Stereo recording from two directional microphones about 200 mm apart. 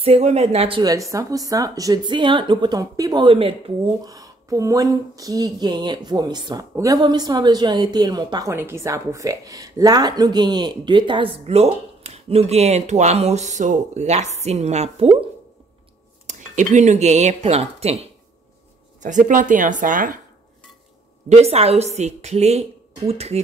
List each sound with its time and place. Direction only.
0.0 s speech: 30° right (ahead or behind)
16.3 s speech: 35° right (ahead or behind)
21.3 s speech: 30° right (ahead or behind)